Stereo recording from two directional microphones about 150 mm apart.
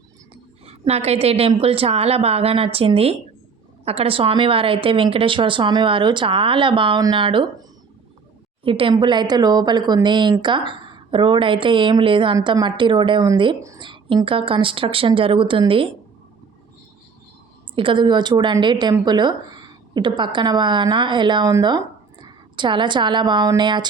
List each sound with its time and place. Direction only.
0.6 s a woman's voice: 45° right (ahead or behind)
8.6 s a woman's voice: 35° right (ahead or behind)
13.6 s a woman's voice: 20° right (ahead or behind)
13.8 s a woman's voice: 35° right (ahead or behind)
17.7 s a woman's voice: 35° right (ahead or behind)